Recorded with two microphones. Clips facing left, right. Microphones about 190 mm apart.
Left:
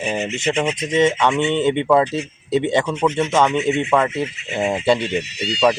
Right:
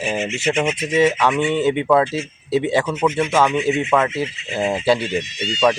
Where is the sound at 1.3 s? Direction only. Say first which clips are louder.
Even; 25° left (ahead or behind).